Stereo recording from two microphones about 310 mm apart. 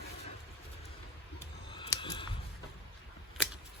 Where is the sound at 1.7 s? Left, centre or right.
Centre.